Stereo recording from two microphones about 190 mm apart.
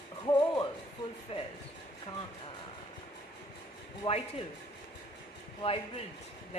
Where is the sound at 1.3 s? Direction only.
30° left (ahead or behind).